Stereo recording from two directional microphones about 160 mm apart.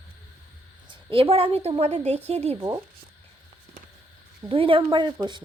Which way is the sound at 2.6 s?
20° right (ahead or behind).